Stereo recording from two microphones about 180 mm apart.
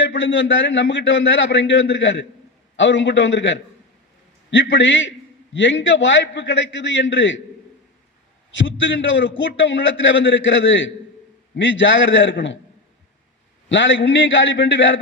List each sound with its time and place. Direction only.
0.0 s a man's voice: 90° left
8.5 s a man's voice: 90° left
13.7 s a man's voice: 90° left